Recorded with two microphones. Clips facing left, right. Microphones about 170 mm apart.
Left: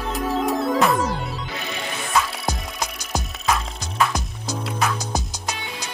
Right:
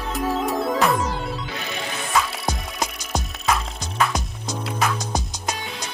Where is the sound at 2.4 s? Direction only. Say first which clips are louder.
Right 1 dB; centre (ahead or behind).